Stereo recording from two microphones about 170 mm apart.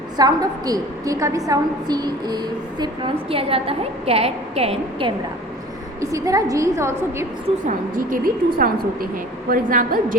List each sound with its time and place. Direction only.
0.2 s a woman's voice: 25° right (ahead or behind)
6.0 s a woman's voice: 20° right (ahead or behind)
7.4 s a woman's voice: 45° right (ahead or behind)